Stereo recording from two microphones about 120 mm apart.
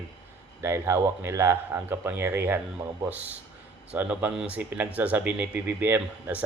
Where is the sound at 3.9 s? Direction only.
10° right (ahead or behind).